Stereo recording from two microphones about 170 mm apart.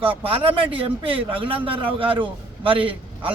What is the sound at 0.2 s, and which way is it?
A man's voice, 30° right (ahead or behind).